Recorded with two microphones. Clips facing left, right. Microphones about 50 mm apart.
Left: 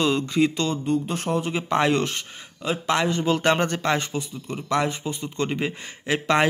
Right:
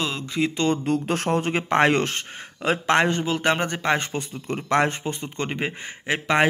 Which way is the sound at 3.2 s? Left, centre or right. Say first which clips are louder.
Left 2 dB; centre.